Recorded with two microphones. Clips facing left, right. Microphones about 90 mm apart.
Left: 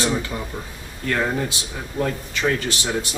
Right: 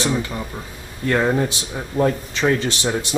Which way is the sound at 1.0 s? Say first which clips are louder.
Right 4 dB; 25° right (ahead or behind).